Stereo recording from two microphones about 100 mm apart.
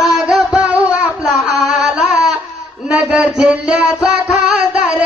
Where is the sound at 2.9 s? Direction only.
10° right (ahead or behind).